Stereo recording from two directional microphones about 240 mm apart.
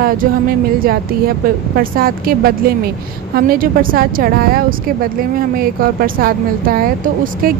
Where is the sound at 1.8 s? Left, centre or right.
Right.